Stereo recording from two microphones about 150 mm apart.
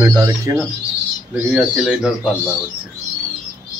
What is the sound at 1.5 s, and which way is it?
Speech, 5° right (ahead or behind).